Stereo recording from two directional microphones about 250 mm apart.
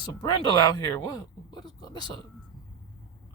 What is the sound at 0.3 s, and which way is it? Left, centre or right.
Speech, centre.